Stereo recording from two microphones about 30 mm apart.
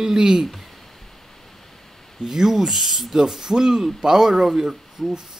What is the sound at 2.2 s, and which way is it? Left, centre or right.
Speech, centre.